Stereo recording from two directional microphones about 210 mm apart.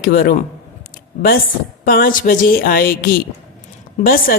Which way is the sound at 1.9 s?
45° left (ahead or behind).